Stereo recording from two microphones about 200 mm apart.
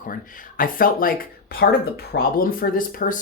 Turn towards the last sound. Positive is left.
turn(degrees=45)  # may be behind; listen again after turning